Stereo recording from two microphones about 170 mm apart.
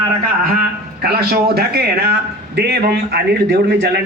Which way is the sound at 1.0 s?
65° right (ahead or behind).